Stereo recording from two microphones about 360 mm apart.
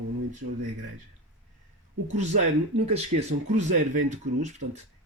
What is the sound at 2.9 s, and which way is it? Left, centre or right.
Speech, centre.